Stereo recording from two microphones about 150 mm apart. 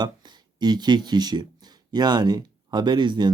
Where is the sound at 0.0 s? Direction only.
30° right (ahead or behind).